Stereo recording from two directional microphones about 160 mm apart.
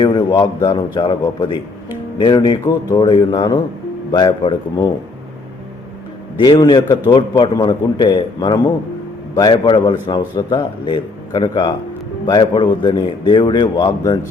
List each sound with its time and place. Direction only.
0.0 s a man's voice: 25° left (ahead or behind)
6.4 s a man's voice: 30° left (ahead or behind)